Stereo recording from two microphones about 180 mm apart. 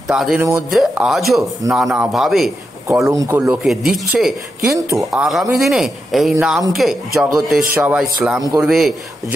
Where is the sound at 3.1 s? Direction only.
15° right (ahead or behind).